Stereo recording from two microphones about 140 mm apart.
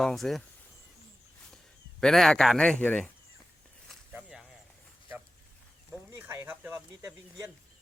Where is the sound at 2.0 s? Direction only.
5° left (ahead or behind).